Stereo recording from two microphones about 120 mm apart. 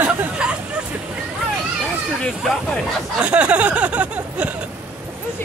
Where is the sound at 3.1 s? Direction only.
10° right (ahead or behind).